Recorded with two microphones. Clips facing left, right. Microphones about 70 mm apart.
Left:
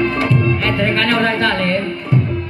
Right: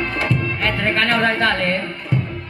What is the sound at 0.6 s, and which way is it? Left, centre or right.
Music, right.